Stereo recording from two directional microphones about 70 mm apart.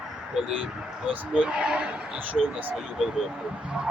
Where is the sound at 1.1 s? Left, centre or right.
Centre.